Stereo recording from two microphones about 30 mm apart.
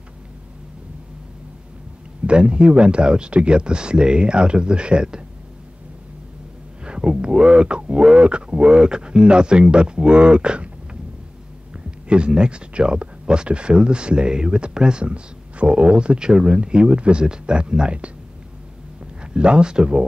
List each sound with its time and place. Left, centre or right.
2.2 s speech: right
6.8 s speech: right
11.7 s speech: right
19.2 s speech: right